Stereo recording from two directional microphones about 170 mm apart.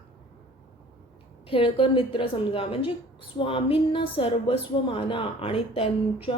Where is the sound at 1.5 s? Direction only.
30° left (ahead or behind).